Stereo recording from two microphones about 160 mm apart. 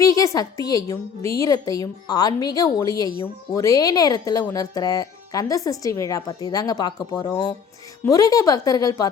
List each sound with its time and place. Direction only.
0.0 s a woman's voice: 20° left (ahead or behind)